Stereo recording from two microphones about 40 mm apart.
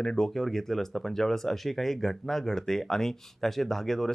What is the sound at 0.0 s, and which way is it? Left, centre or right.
Speech, centre.